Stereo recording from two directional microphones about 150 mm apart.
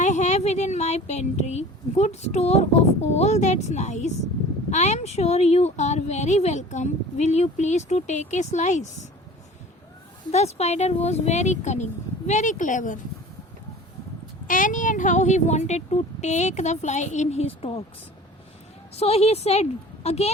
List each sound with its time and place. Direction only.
0.0 s speech: 50° left (ahead or behind)
10.3 s speech: 45° left (ahead or behind)
14.4 s speech: 60° left (ahead or behind); by 17.8 s 40° left (ahead or behind)
18.9 s speech: 45° left (ahead or behind)